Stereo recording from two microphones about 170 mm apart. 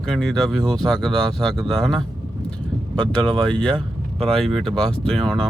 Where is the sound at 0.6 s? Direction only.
20° right (ahead or behind).